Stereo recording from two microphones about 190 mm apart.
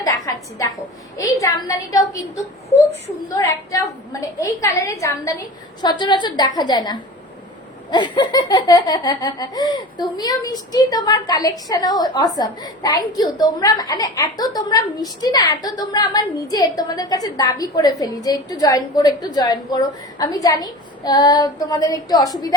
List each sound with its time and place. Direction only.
0.0 s a woman's voice: 20° left (ahead or behind)